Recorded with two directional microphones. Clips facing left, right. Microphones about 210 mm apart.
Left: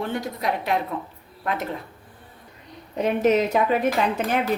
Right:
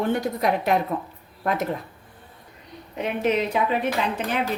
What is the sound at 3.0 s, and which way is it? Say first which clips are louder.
Speech: left 4 dB; 40° left (ahead or behind).